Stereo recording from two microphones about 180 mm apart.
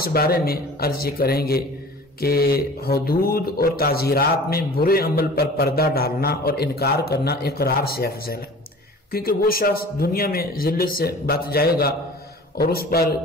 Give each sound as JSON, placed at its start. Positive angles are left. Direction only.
{"t": 0.0, "sound": "speech", "side_deg": 55}